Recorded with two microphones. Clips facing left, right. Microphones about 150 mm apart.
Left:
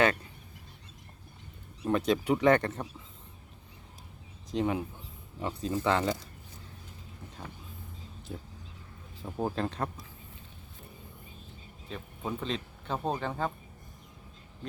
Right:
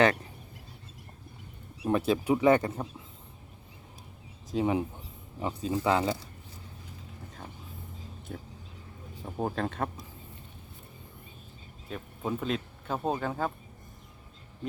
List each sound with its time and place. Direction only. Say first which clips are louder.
1.8 s speech: right 1 dB; 10° right (ahead or behind)
4.5 s speech: right 2 dB; 15° right (ahead or behind)
8.3 s speech: even; 5° left (ahead or behind)
11.9 s speech: right 3 dB; 5° right (ahead or behind)